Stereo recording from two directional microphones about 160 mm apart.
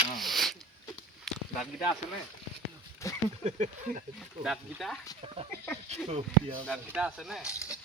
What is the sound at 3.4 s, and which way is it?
Speech, 45° right (ahead or behind).